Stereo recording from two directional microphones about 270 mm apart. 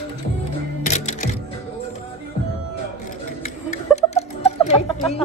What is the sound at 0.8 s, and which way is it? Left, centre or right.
Music, left.